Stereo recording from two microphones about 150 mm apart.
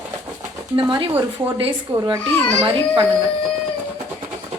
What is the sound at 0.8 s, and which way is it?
A child's voice, 35° right (ahead or behind).